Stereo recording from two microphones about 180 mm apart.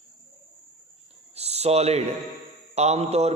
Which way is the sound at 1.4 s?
35° right (ahead or behind).